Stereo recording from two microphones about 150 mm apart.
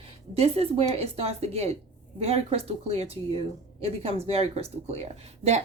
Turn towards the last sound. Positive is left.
turn(degrees=-45)  # may be behind; listen again after turning